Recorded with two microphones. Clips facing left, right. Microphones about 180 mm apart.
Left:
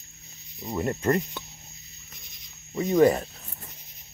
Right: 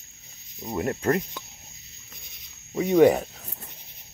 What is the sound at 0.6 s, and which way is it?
Speech, 15° right (ahead or behind).